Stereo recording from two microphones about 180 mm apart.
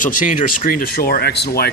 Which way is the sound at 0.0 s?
45° left (ahead or behind).